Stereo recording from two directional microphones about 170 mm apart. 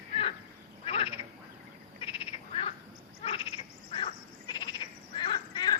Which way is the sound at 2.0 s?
35° left (ahead or behind).